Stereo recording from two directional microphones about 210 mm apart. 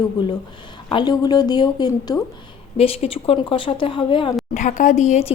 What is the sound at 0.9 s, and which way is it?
Speech, 20° left (ahead or behind).